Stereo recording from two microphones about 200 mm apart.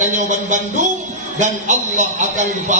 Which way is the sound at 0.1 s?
40° right (ahead or behind).